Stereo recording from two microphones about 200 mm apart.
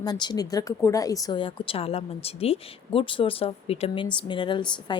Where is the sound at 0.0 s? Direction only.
20° left (ahead or behind).